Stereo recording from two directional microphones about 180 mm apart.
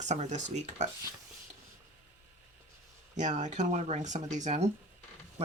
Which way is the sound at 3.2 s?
40° right (ahead or behind).